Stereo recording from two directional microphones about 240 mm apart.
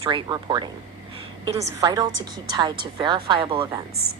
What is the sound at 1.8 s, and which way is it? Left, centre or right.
A woman's voice, centre.